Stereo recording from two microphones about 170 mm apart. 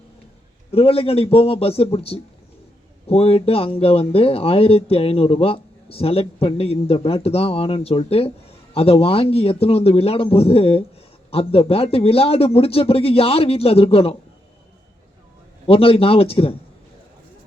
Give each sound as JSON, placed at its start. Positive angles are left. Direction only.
{"t": 0.7, "sound": "speech", "side_deg": 35}
{"t": 15.6, "sound": "speech", "side_deg": 35}